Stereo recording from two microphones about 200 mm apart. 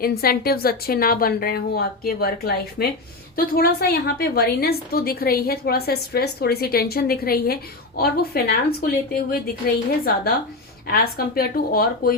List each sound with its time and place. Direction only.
0.0 s a woman's voice: 50° left (ahead or behind)
10.8 s a woman's voice: 50° left (ahead or behind)